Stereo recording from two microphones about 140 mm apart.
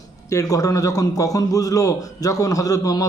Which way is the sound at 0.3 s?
25° left (ahead or behind).